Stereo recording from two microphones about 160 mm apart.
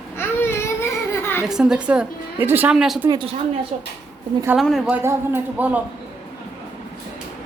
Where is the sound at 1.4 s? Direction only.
5° right (ahead or behind).